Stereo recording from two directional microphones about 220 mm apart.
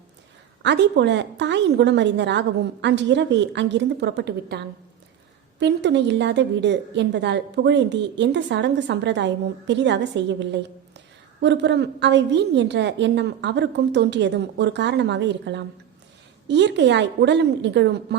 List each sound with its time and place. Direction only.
0.6 s a woman's voice: 55° right (ahead or behind)